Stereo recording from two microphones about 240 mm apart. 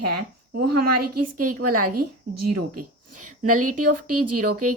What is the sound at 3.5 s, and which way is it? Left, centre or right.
A woman's voice, right.